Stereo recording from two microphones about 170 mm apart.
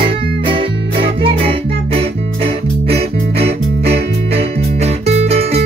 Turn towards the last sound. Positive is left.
turn(degrees=-40)  # may be behind; listen again after turning